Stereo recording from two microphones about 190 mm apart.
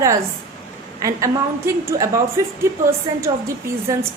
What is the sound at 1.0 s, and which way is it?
A woman's voice, 15° right (ahead or behind).